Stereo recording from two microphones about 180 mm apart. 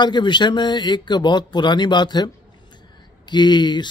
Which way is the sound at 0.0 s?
25° left (ahead or behind).